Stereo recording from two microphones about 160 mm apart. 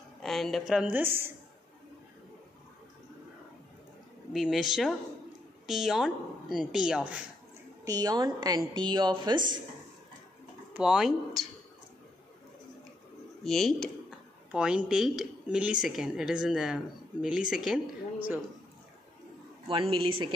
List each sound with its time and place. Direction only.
0.2 s speech: centre (ahead or behind)
4.3 s speech: centre (ahead or behind)
7.8 s a woman's voice: 25° right (ahead or behind)
10.7 s speech: 5° right (ahead or behind)
13.4 s speech: centre (ahead or behind)
19.7 s speech: 35° right (ahead or behind)